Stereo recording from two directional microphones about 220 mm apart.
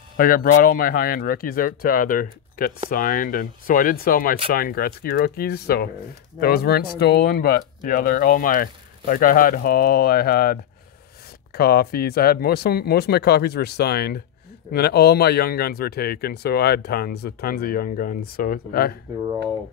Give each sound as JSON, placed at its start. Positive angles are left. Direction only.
{"t": 0.2, "sound": "speech", "side_deg": 40}